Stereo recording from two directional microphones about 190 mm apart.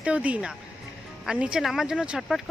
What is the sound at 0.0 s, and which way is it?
Speech, 5° right (ahead or behind).